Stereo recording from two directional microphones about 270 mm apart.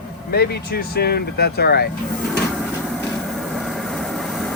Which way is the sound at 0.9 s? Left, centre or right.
Left.